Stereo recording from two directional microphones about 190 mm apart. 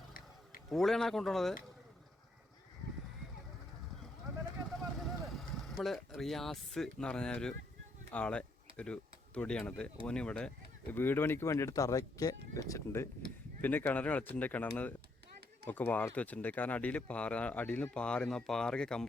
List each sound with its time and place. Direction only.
0.7 s speech: centre (ahead or behind)
4.9 s speech: centre (ahead or behind)